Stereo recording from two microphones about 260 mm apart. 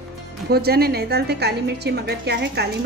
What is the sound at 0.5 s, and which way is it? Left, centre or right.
A woman's voice, right.